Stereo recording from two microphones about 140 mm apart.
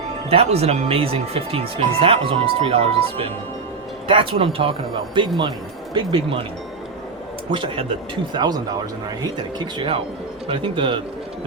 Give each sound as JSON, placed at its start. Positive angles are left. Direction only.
{"t": 0.3, "sound": "speech", "side_deg": -45}
{"t": 7.5, "sound": "speech", "side_deg": -35}